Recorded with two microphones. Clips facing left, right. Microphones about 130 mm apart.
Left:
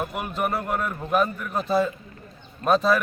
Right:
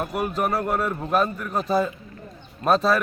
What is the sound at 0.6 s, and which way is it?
Speech, 5° right (ahead or behind).